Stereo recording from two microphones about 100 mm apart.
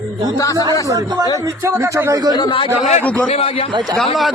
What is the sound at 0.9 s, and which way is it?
Speech, 35° right (ahead or behind).